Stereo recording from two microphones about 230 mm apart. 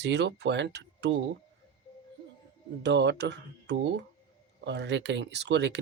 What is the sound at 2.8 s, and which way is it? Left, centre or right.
Speech, right.